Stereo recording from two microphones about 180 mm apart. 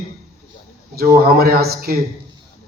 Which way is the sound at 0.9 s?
60° right (ahead or behind).